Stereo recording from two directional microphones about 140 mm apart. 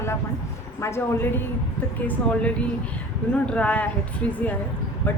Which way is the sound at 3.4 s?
10° left (ahead or behind).